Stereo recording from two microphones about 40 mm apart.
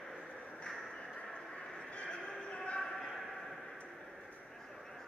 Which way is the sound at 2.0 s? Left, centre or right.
Left.